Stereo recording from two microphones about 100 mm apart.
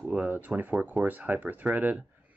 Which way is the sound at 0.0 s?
15° right (ahead or behind).